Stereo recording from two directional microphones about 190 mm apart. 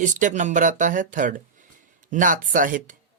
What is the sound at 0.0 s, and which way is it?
Speech, 40° right (ahead or behind).